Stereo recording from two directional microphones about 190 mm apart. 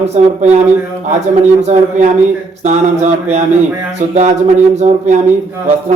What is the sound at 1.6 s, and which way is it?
Speech, 35° right (ahead or behind).